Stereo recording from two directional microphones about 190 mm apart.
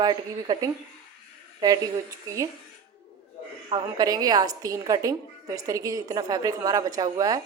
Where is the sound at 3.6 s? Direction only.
20° right (ahead or behind).